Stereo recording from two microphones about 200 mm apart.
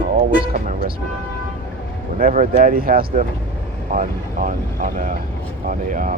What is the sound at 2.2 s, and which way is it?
Speech, 40° right (ahead or behind).